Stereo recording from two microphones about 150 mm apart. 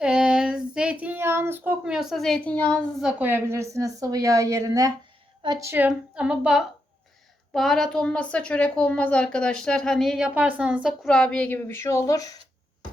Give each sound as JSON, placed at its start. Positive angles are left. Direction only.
{"t": 0.0, "sound": "a sound", "side_deg": -5}
{"t": 3.1, "sound": "a woman's voice", "side_deg": -10}
{"t": 11.0, "sound": "speech", "side_deg": 5}